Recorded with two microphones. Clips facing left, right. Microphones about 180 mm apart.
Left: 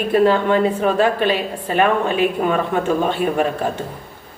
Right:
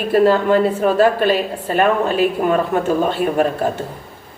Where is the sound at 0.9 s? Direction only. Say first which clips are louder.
Right 3 dB; 45° right (ahead or behind).